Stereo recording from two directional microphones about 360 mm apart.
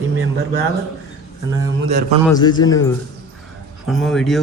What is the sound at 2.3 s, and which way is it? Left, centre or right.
A man's voice, centre.